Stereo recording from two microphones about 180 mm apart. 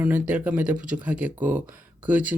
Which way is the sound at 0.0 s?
10° right (ahead or behind).